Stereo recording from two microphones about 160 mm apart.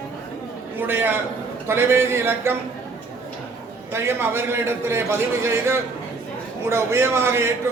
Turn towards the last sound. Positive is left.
turn(degrees=-15)  # may be behind; listen again after turning